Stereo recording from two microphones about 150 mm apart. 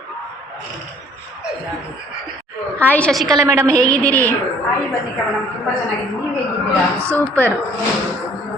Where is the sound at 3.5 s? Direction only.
15° right (ahead or behind).